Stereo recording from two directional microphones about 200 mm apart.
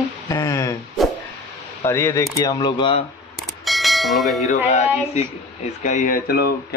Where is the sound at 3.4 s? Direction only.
Centre (ahead or behind).